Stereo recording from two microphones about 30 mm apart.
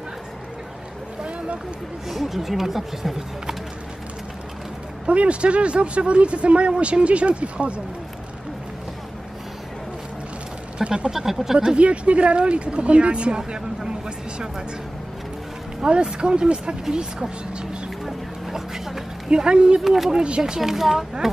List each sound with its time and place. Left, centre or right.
2.0 s speech: centre
5.0 s speech: right
10.8 s speech: right
11.1 s speech: centre
11.5 s speech: right
11.8 s speech: right
15.9 s speech: right
18.5 s vehicle: centre
19.2 s speech: right
19.8 s speech: centre
20.2 s speech: right
20.5 s speech: centre